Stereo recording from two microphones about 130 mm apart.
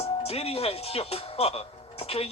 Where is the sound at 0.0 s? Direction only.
50° left (ahead or behind).